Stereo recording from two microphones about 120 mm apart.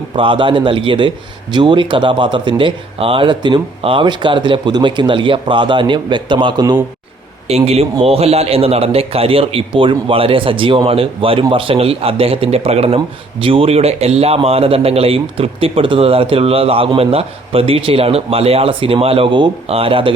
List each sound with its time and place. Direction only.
0.2 s a man's voice: 45° right (ahead or behind)
7.4 s a man's voice: 60° right (ahead or behind)